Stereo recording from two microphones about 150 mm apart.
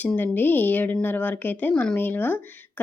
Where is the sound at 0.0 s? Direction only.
10° left (ahead or behind).